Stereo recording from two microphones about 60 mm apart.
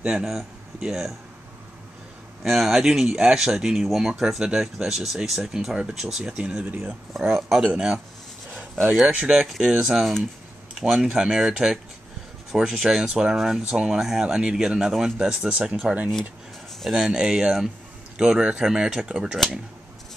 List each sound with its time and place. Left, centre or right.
0.2 s speech: centre
2.4 s speech: centre; by 6.9 s right
6.9 s speech: centre
8.5 s a sound: right
9.1 s speech: centre
9.8 s speech: centre
10.7 s speech: centre